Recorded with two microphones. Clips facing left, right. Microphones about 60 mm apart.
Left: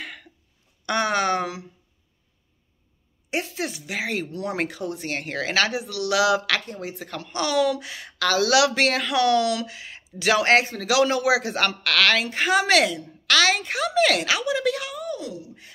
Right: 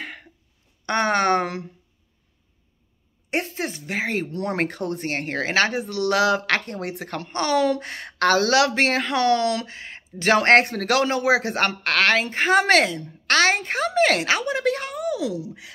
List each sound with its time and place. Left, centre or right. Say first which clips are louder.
0.0 s a sound: right 2 dB; right
0.8 s a woman's voice: right 2 dB; right
3.3 s speech: right 2 dB; right
6.6 s a woman's voice: right 3 dB; right
11.1 s speech: right 1 dB; right
15.0 s speech: right 6 dB; right